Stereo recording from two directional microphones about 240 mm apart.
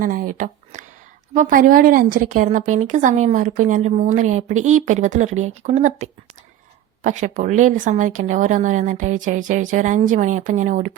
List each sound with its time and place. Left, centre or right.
0.0 s a woman's voice: right